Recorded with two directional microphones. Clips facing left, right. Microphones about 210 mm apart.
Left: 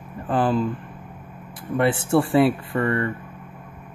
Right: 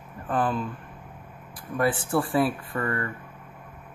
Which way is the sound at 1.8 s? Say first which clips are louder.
Left 5 dB; 25° left (ahead or behind).